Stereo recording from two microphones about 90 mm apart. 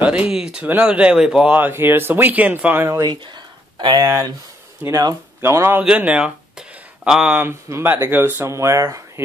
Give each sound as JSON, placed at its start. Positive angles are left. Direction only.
{"t": 0.0, "sound": "speech", "side_deg": -10}
{"t": 4.0, "sound": "speech", "side_deg": -40}
{"t": 4.8, "sound": "speech", "side_deg": -25}
{"t": 5.8, "sound": "speech", "side_deg": -15}
{"t": 7.3, "sound": "speech", "side_deg": -25}